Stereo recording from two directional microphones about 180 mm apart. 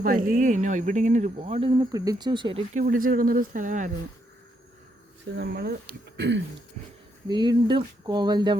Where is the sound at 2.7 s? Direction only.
50° right (ahead or behind).